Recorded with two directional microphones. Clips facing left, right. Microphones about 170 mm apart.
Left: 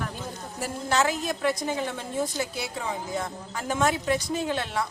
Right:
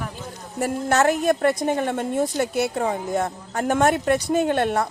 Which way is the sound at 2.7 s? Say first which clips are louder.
Right 8 dB; 45° right (ahead or behind).